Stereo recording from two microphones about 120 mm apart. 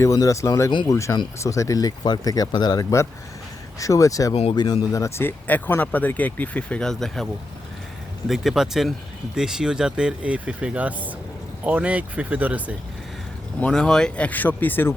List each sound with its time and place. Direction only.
0.0 s speech: 25° left (ahead or behind); by 7.3 s 5° left (ahead or behind)
8.3 s speech: centre (ahead or behind)
13.6 s speech: 5° left (ahead or behind)